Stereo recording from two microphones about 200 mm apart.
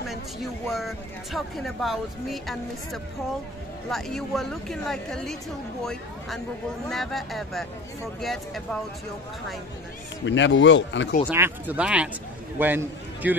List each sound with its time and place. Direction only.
0.0 s speech: centre (ahead or behind)
6.9 s speech: centre (ahead or behind)
10.2 s speech: 65° left (ahead or behind)
11.2 s speech: 10° right (ahead or behind)